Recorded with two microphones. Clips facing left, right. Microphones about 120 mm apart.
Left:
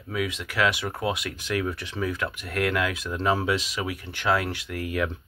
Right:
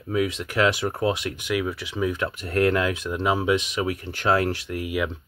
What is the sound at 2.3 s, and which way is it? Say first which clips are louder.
Speech: right 5 dB; 35° right (ahead or behind).